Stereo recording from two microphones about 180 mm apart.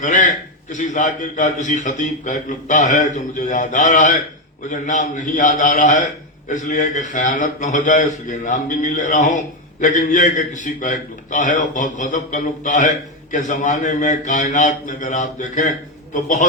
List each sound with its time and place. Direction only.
0.0 s a man's voice: 45° left (ahead or behind)